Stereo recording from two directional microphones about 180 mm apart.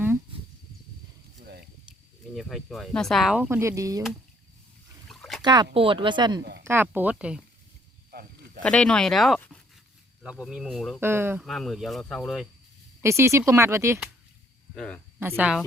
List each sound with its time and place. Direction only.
1.5 s snake: 65° right (ahead or behind)
2.3 s speech: centre (ahead or behind); by 4.0 s 20° right (ahead or behind)
5.0 s a sound: centre (ahead or behind)
5.4 s speech: 20° right (ahead or behind)
6.7 s speech: 10° right (ahead or behind)
8.6 s speech: 5° left (ahead or behind)
11.0 s speech: 15° right (ahead or behind)
11.4 s speech: centre (ahead or behind)
13.0 s speech: 15° right (ahead or behind)
14.8 s speech: 5° left (ahead or behind)
15.2 s speech: 10° right (ahead or behind)